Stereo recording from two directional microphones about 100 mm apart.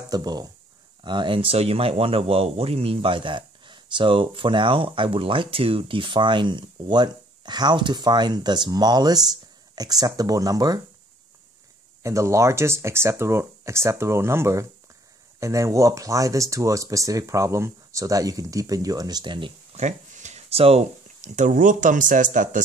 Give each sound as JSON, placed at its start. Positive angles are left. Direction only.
{"t": 0.1, "sound": "speech", "side_deg": -40}
{"t": 1.0, "sound": "speech", "side_deg": -50}
{"t": 12.0, "sound": "speech", "side_deg": -30}
{"t": 20.3, "sound": "a sound", "side_deg": -85}